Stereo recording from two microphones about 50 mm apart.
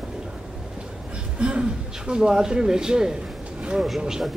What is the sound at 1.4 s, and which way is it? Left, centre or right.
Speech, right.